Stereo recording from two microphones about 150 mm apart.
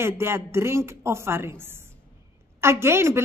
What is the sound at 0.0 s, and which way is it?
A woman's voice, 15° right (ahead or behind).